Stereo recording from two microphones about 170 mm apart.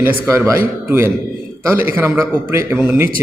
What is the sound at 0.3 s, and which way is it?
A man's voice, 15° right (ahead or behind).